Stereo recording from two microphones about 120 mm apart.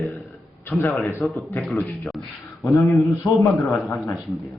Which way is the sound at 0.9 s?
Centre (ahead or behind).